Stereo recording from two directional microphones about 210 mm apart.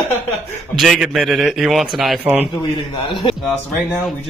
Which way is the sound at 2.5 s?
20° left (ahead or behind).